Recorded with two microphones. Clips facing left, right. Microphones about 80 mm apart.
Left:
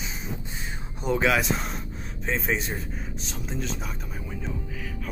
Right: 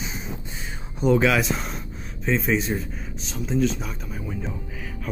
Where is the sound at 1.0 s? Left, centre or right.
Centre.